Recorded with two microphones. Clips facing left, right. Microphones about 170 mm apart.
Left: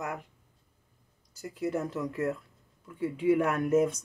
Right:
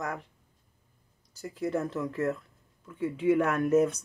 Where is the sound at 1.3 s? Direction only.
10° left (ahead or behind).